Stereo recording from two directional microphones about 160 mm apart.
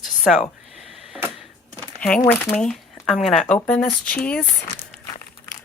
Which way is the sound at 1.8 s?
5° left (ahead or behind).